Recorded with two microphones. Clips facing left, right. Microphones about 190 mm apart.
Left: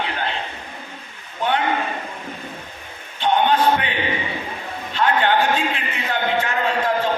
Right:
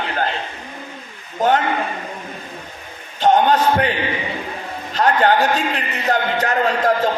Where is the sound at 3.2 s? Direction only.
40° right (ahead or behind).